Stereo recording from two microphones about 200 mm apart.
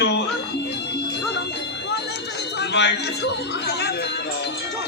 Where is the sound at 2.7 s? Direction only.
60° left (ahead or behind).